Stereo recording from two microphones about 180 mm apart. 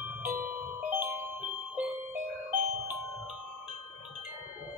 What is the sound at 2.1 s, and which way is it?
Music, 45° right (ahead or behind).